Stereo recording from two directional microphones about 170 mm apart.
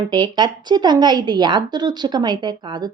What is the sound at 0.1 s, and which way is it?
A woman's voice, 25° right (ahead or behind).